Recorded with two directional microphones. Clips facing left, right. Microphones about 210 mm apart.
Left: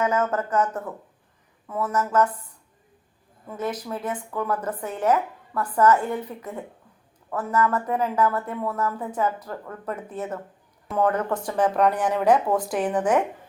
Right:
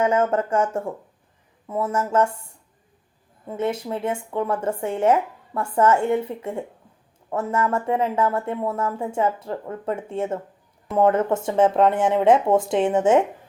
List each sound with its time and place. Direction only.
0.0 s a woman's voice: 30° right (ahead or behind)
3.4 s a woman's voice: 25° right (ahead or behind)